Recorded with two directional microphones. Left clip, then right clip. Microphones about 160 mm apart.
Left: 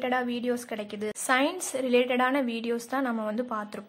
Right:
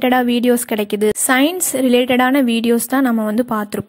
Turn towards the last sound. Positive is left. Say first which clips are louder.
# right 13 dB
turn(degrees=-50)  # may be behind; listen again after turning